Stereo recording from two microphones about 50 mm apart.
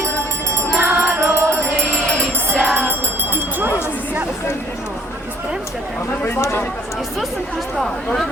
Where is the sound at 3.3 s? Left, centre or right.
Right.